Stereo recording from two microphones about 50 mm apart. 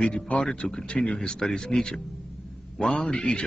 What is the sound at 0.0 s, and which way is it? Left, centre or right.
Speech, left.